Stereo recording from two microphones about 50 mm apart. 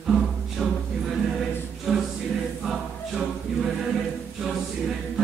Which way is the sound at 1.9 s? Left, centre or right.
Centre.